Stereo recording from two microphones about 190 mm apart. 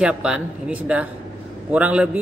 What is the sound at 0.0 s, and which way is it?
A man's voice, 5° right (ahead or behind).